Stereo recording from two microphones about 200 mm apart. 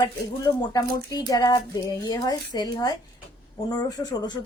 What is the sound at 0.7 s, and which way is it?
Speech, 15° left (ahead or behind).